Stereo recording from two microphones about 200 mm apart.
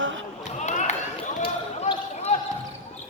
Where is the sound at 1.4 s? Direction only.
30° left (ahead or behind).